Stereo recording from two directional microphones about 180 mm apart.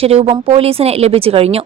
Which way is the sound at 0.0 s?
35° right (ahead or behind).